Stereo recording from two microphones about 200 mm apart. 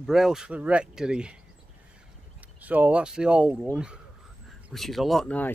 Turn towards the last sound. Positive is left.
turn(degrees=10)  # may be behind; listen again after turning